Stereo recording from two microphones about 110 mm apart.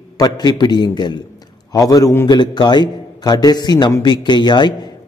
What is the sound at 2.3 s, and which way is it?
A man's voice, 40° left (ahead or behind).